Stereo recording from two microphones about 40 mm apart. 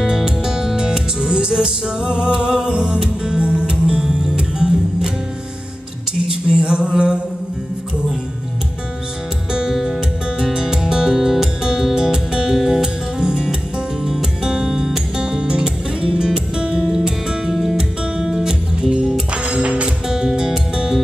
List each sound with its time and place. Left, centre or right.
0.0 s music: centre
6.5 s music: right
6.9 s mantra: right
9.5 s music: centre
20.1 s music: centre